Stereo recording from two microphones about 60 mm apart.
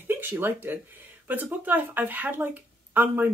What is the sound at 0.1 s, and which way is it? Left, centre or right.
Speech, right.